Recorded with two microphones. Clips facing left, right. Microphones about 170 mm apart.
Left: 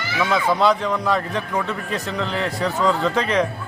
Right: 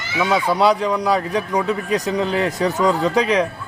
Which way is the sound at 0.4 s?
10° right (ahead or behind).